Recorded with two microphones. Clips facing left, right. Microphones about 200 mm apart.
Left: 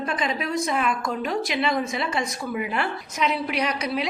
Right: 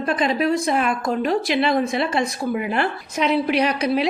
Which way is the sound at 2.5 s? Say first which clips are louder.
Right 3 dB; 50° right (ahead or behind).